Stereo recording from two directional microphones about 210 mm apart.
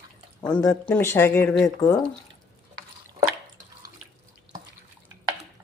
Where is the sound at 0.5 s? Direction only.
10° left (ahead or behind).